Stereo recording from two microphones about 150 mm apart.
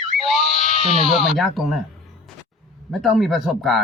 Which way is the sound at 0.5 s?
55° left (ahead or behind).